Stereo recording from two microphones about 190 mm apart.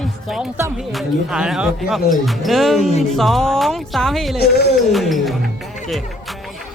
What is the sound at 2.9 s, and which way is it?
Music, 35° left (ahead or behind).